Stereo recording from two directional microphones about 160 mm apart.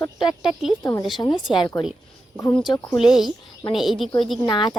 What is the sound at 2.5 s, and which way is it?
Speech, centre (ahead or behind).